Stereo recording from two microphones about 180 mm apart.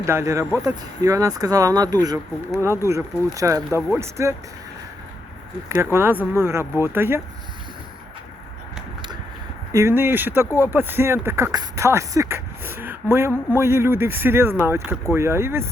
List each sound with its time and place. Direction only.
0.0 s speech: 15° right (ahead or behind)
5.6 s speech: 15° right (ahead or behind)
9.7 s speech: 15° right (ahead or behind)